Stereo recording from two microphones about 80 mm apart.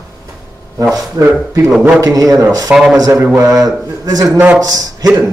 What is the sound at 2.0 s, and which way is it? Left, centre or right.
Speech, right.